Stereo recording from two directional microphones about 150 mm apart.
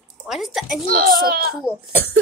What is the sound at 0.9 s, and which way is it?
Speech, 75° right (ahead or behind).